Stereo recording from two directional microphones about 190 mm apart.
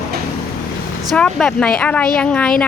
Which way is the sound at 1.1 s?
5° left (ahead or behind).